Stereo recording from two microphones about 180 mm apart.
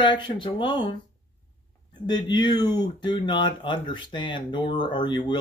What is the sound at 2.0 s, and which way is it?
Speech, 25° left (ahead or behind).